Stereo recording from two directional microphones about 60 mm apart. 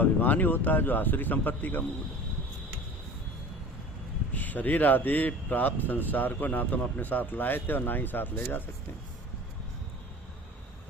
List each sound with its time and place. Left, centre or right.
0.0 s speech: left
4.4 s speech: left